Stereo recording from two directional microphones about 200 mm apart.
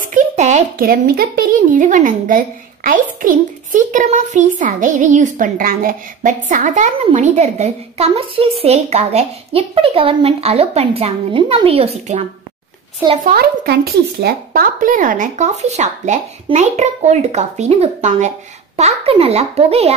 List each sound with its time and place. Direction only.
0.0 s speech: 40° right (ahead or behind)
13.2 s speech: 50° right (ahead or behind); by 20.0 s 30° right (ahead or behind)